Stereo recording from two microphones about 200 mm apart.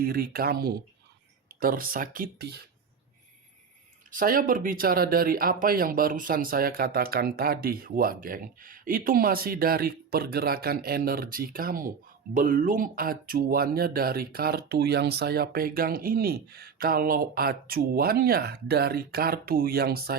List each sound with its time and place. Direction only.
0.0 s speech: 50° right (ahead or behind)
4.1 s speech: 45° right (ahead or behind)